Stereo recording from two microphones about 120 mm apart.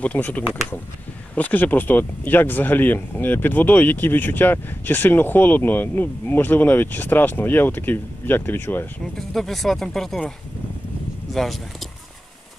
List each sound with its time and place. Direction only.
0.0 s speech: 10° left (ahead or behind)
9.3 s speech: centre (ahead or behind)
11.3 s speech: centre (ahead or behind)